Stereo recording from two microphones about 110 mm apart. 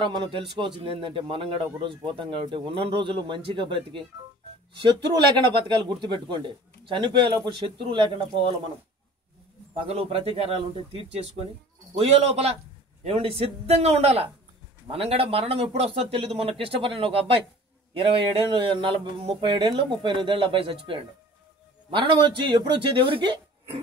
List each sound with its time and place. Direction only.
0.0 s a man's voice: 45° right (ahead or behind)
9.8 s a man's voice: 65° right (ahead or behind)
18.7 s a man's voice: 50° right (ahead or behind)